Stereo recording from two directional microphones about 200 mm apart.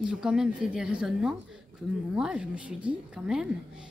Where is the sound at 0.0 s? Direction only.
5° right (ahead or behind).